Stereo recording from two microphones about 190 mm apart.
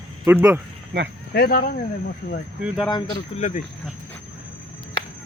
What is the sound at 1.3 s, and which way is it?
Speech, 55° left (ahead or behind).